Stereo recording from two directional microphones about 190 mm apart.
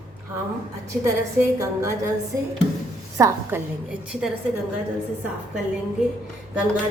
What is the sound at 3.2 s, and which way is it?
Speech, 15° right (ahead or behind).